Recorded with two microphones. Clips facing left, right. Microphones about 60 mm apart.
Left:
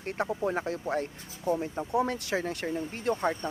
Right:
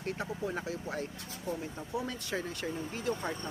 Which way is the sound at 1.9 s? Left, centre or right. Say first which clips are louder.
Left 8 dB; left.